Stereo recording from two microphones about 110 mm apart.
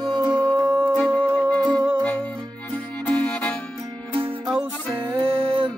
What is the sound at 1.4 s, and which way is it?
Music, 15° left (ahead or behind).